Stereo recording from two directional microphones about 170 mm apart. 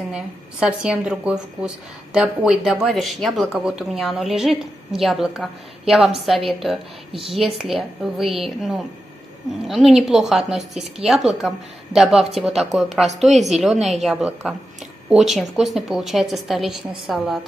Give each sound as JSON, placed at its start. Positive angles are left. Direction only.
{"t": 0.1, "sound": "speech", "side_deg": -5}